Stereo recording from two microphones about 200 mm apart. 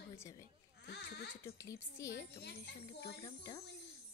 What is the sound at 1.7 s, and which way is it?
Speech, 15° left (ahead or behind).